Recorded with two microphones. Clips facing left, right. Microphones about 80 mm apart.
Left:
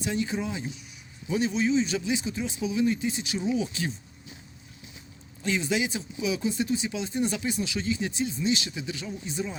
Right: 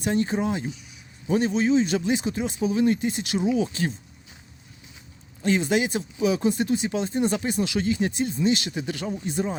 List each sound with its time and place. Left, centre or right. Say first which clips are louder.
0.0 s speech: right 5 dB; right
5.4 s speech: right 5 dB; right